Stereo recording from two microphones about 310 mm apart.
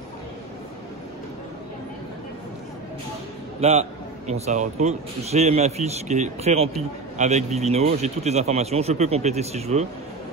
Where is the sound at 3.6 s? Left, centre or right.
Centre.